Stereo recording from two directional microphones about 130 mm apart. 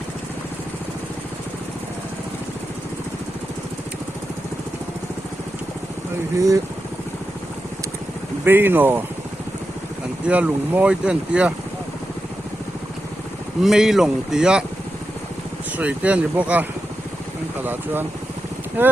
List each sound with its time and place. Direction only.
6.3 s speech: 25° right (ahead or behind)
8.4 s speech: 15° right (ahead or behind)
10.2 s speech: 10° right (ahead or behind)
13.6 s speech: 5° right (ahead or behind)
15.8 s speech: 10° right (ahead or behind)